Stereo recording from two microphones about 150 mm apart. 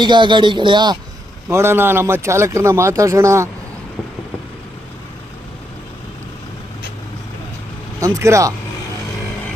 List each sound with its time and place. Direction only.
0.0 s speech: 30° right (ahead or behind)
1.5 s speech: 15° right (ahead or behind)
8.0 s speech: 20° right (ahead or behind)